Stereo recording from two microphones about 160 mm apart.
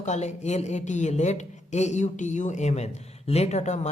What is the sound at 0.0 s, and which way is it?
Speech, 45° left (ahead or behind).